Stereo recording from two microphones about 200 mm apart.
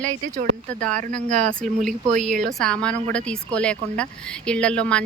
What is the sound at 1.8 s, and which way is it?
Speech, 40° right (ahead or behind).